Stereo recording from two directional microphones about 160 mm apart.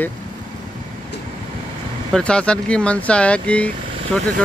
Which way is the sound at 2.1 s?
5° left (ahead or behind).